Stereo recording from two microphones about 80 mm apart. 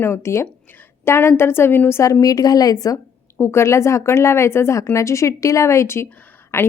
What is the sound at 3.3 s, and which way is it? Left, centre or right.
Speech, left.